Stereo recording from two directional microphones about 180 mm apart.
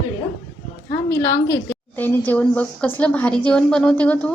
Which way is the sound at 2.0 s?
10° left (ahead or behind).